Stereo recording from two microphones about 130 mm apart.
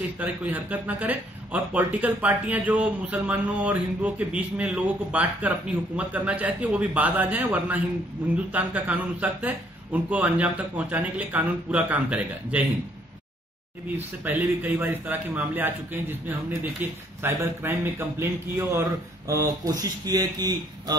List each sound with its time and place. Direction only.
0.2 s a man's voice: 10° right (ahead or behind)
13.9 s a man's voice: 15° right (ahead or behind)